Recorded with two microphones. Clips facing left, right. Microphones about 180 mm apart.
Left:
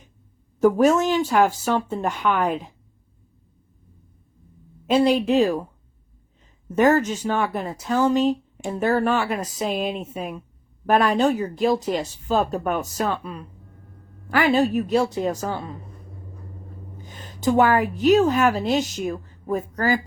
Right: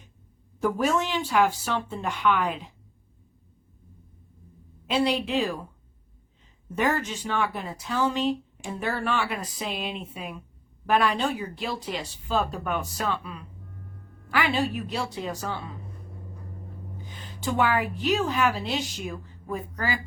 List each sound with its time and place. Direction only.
0.6 s speech: 45° left (ahead or behind)
4.9 s speech: 45° left (ahead or behind)
6.7 s speech: 45° left (ahead or behind)
17.0 s a woman's voice: 45° left (ahead or behind)